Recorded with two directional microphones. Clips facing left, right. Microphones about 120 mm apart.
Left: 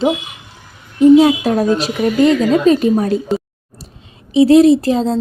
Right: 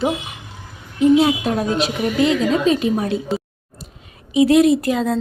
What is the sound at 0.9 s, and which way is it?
A woman's voice, 40° left (ahead or behind).